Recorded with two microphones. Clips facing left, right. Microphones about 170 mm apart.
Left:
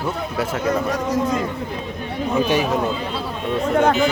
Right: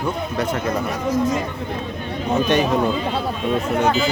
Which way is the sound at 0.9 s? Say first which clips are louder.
Right 1 dB; 75° left (ahead or behind).